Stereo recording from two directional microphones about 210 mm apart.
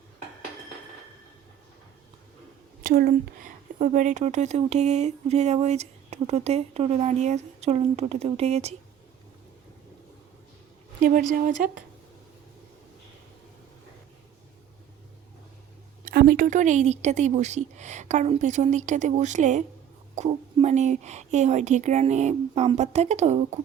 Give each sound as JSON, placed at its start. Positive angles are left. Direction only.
{"t": 2.8, "sound": "a woman's voice", "side_deg": -40}
{"t": 11.0, "sound": "a woman's voice", "side_deg": -40}
{"t": 16.0, "sound": "a woman's voice", "side_deg": -45}